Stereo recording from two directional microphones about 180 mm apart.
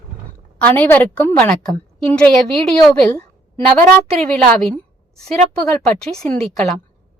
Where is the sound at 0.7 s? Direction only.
10° left (ahead or behind).